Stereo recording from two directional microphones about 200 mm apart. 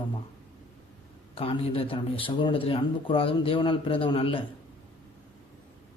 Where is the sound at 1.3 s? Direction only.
25° left (ahead or behind).